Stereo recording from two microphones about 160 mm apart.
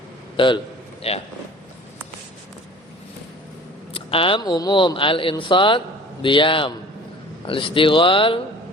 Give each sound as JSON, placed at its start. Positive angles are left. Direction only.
{"t": 0.3, "sound": "speech", "side_deg": 30}
{"t": 3.9, "sound": "speech", "side_deg": 35}